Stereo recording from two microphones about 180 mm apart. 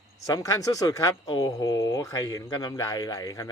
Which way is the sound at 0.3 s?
20° left (ahead or behind).